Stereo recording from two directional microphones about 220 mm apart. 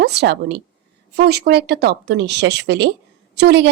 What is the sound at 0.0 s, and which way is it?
A woman's voice, 50° right (ahead or behind).